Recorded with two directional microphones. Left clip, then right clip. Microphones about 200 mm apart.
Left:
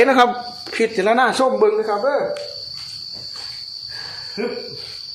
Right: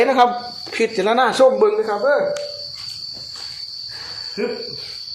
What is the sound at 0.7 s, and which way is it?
Speech, 10° left (ahead or behind).